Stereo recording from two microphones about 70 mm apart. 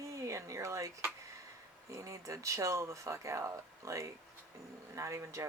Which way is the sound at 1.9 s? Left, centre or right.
Right.